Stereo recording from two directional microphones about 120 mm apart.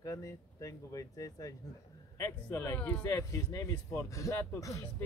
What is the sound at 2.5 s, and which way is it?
Speech, 20° left (ahead or behind).